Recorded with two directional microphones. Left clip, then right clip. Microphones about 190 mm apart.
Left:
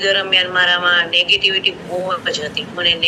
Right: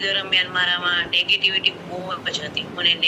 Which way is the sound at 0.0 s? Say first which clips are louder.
Left 6 dB; 5° right (ahead or behind).